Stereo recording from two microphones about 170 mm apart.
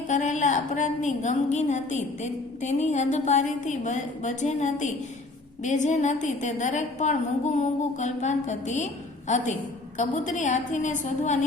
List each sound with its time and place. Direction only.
0.1 s a woman's voice: 45° left (ahead or behind)